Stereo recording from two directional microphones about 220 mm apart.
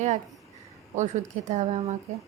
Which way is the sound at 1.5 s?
30° right (ahead or behind).